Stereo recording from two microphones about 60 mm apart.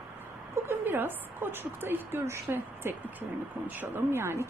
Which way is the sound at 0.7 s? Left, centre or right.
Right.